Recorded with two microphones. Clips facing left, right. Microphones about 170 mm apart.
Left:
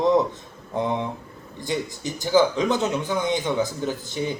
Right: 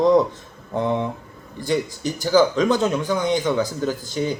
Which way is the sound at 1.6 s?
20° left (ahead or behind).